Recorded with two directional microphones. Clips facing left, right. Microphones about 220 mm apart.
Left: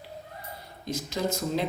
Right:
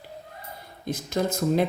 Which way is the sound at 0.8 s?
55° right (ahead or behind).